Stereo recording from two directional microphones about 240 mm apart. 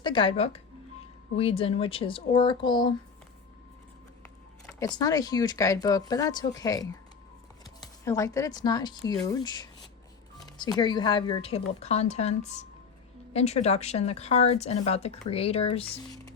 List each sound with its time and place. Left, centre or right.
0.0 s speech: centre
4.6 s a sound: centre
4.9 s speech: centre